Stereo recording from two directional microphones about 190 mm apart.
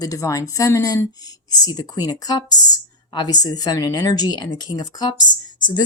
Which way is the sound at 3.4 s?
20° left (ahead or behind).